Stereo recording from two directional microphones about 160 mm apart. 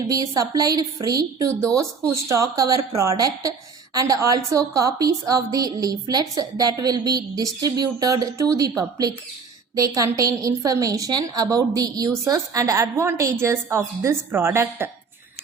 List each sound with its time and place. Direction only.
0.1 s a woman's voice: 25° right (ahead or behind)
9.7 s a woman's voice: 20° right (ahead or behind)